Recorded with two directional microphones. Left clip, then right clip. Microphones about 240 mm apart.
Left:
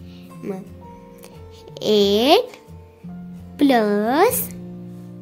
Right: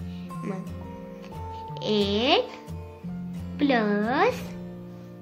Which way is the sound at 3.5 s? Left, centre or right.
Left.